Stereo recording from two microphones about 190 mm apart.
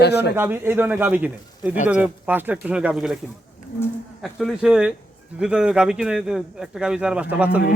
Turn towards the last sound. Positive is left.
turn(degrees=-10)  # may be behind; listen again after turning